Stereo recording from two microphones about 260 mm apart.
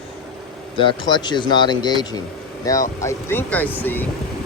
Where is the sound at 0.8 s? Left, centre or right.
Centre.